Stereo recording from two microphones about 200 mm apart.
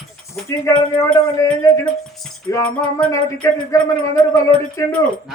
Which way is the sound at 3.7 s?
15° left (ahead or behind).